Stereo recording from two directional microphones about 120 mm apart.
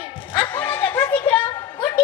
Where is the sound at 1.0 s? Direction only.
40° left (ahead or behind).